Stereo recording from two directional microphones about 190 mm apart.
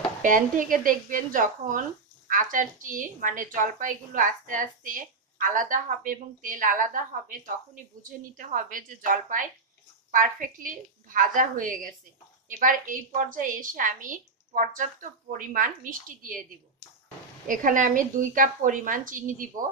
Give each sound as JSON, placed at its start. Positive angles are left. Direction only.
{"t": 0.2, "sound": "a woman's voice", "side_deg": -45}
{"t": 17.5, "sound": "a woman's voice", "side_deg": -45}